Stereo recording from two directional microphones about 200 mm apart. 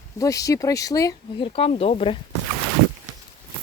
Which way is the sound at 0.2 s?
15° left (ahead or behind).